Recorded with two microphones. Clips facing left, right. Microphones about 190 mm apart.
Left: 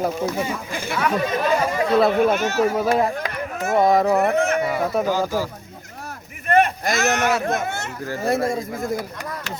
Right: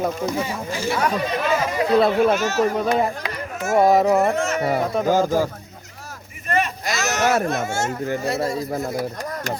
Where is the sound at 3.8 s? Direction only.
5° right (ahead or behind).